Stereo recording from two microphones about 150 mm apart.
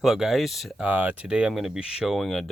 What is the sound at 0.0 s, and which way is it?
Speech, centre (ahead or behind).